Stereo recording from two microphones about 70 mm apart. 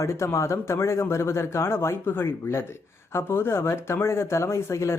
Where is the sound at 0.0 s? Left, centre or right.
Left.